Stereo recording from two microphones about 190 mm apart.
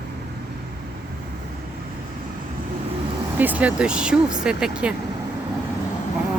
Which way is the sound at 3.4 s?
10° right (ahead or behind).